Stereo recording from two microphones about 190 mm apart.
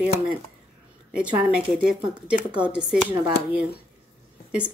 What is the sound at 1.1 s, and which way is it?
A woman's voice, 5° right (ahead or behind).